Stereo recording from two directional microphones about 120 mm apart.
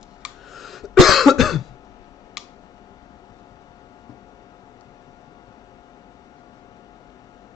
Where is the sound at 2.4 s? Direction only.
5° right (ahead or behind).